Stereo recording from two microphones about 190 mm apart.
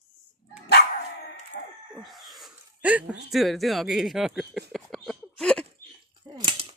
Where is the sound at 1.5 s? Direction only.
45° left (ahead or behind).